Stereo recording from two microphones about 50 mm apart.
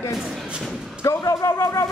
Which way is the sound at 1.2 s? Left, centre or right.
Left.